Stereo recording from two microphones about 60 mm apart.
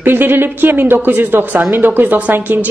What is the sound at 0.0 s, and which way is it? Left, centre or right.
A woman's voice, right.